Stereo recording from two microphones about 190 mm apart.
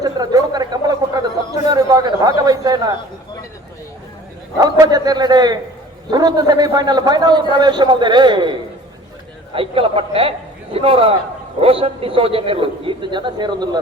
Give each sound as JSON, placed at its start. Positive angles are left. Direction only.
{"t": 0.0, "sound": "a sound", "side_deg": -20}
{"t": 1.6, "sound": "a man's voice", "side_deg": -20}
{"t": 4.5, "sound": "a man's voice", "side_deg": -20}
{"t": 9.6, "sound": "a man's voice", "side_deg": -30}